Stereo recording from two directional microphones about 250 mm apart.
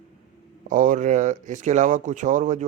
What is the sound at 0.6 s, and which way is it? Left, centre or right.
Speech, right.